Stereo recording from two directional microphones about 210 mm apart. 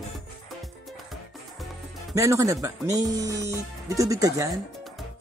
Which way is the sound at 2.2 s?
15° right (ahead or behind).